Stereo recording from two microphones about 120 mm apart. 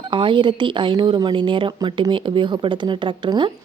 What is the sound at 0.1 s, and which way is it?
Speech, 45° right (ahead or behind).